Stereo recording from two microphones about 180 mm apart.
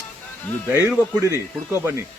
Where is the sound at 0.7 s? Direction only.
10° right (ahead or behind).